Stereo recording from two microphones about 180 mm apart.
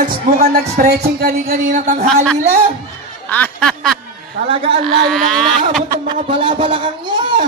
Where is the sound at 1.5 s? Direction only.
50° right (ahead or behind).